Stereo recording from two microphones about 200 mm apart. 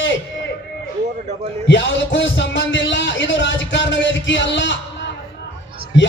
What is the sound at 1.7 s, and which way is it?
Music, 65° left (ahead or behind).